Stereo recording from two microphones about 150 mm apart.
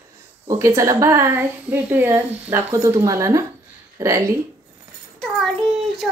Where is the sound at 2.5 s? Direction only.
20° right (ahead or behind).